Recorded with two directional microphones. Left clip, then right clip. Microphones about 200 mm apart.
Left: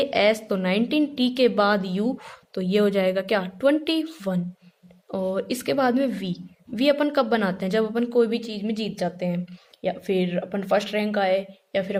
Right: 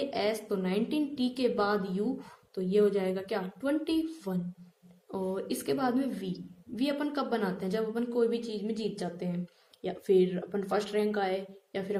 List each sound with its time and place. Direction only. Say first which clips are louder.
0.0 s a woman's voice: left 11 dB; 30° left (ahead or behind)